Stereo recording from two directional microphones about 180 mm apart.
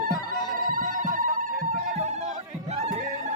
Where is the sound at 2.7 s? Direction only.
35° right (ahead or behind).